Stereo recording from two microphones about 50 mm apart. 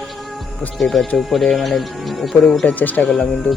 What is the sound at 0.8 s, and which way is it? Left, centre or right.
Speech, centre.